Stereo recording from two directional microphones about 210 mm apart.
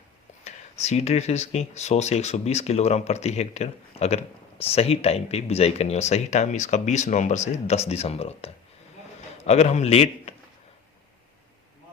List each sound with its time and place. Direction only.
0.4 s speech: 30° left (ahead or behind)
9.5 s speech: 30° left (ahead or behind)